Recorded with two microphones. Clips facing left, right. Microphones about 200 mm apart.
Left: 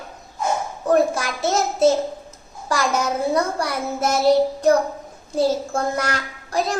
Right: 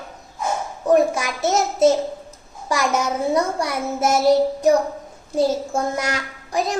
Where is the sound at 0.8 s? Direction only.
20° right (ahead or behind).